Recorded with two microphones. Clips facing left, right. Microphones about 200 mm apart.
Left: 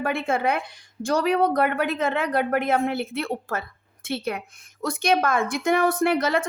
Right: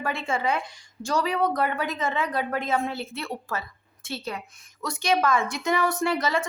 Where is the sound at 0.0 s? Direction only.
55° left (ahead or behind).